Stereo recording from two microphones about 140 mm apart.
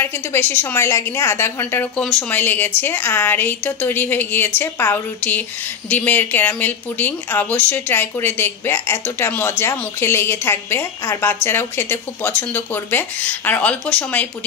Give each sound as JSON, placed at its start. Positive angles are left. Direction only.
{"t": 0.0, "sound": "speech", "side_deg": 15}